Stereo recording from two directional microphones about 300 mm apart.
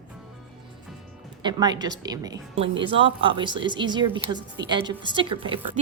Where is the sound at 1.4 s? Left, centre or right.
Centre.